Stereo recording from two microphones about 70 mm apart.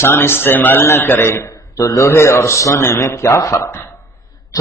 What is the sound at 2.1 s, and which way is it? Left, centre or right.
A man's voice, left.